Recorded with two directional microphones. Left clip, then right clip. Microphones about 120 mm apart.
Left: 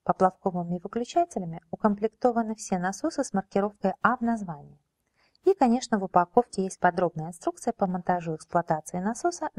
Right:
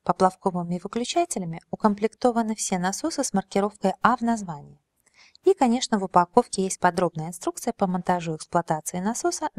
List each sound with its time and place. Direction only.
0.0 s a woman's voice: 25° right (ahead or behind)